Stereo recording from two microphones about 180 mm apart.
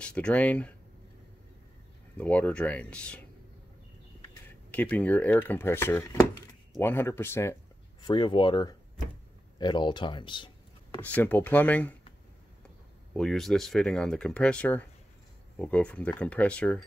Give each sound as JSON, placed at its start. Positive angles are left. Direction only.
{"t": 0.0, "sound": "speech", "side_deg": 5}
{"t": 2.1, "sound": "speech", "side_deg": 5}
{"t": 4.6, "sound": "speech", "side_deg": 10}
{"t": 8.0, "sound": "speech", "side_deg": 25}
{"t": 11.0, "sound": "speech", "side_deg": 10}
{"t": 13.1, "sound": "speech", "side_deg": 5}